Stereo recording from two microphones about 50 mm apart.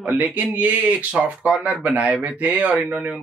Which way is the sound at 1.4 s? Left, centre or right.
Right.